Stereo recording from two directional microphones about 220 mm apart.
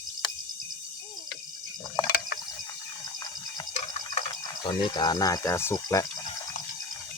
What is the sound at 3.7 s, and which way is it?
Mechanisms, 25° left (ahead or behind).